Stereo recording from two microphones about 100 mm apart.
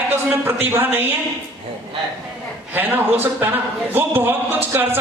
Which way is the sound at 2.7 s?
20° right (ahead or behind).